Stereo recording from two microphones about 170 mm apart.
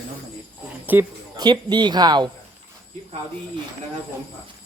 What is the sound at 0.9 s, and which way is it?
Speech, 10° right (ahead or behind).